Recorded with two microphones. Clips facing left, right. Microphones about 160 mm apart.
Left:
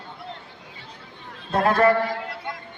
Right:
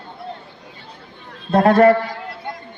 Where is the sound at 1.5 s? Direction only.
35° right (ahead or behind).